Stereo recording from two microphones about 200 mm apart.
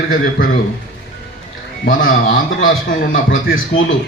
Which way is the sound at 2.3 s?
45° left (ahead or behind).